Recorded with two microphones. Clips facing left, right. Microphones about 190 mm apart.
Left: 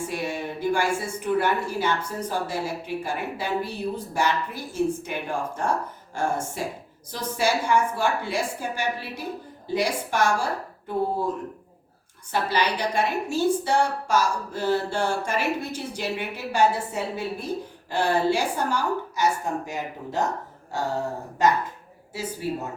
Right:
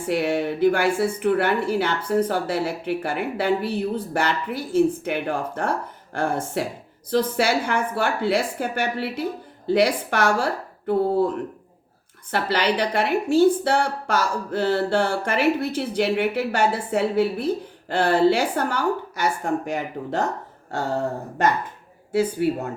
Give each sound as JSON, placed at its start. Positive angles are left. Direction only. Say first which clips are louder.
{"t": 0.1, "sound": "a woman's voice", "louder": "right 7 dB", "side_deg": -65}
{"t": 12.3, "sound": "a woman's voice", "louder": "right 3 dB", "side_deg": -65}
{"t": 22.1, "sound": "a woman's voice", "louder": "right 9 dB", "side_deg": -60}